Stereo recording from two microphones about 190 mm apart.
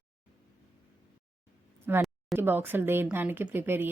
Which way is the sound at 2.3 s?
10° right (ahead or behind).